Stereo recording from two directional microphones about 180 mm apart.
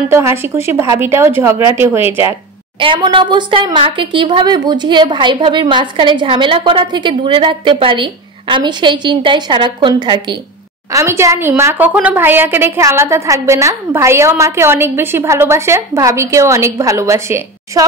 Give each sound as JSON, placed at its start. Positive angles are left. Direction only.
{"t": 0.1, "sound": "a woman's voice", "side_deg": -15}
{"t": 2.8, "sound": "a woman's voice", "side_deg": -25}